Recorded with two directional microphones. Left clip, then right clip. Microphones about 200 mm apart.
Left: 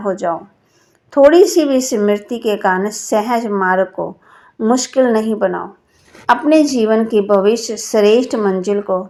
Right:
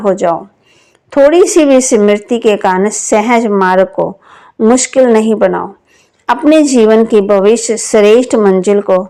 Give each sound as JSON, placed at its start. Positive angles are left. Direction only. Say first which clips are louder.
{"t": 0.0, "sound": "a woman's voice", "louder": "right 7 dB", "side_deg": -35}